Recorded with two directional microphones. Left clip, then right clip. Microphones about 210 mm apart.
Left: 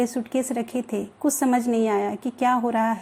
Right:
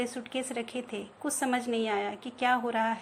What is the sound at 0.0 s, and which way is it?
A woman's voice, 40° left (ahead or behind).